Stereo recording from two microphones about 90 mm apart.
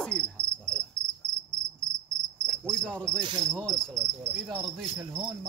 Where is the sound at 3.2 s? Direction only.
60° right (ahead or behind).